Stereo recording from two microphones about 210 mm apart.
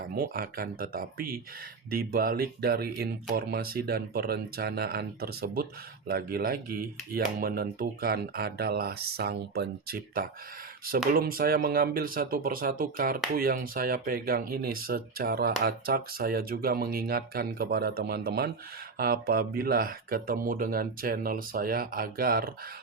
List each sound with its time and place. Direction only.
0.0 s speech: 45° right (ahead or behind)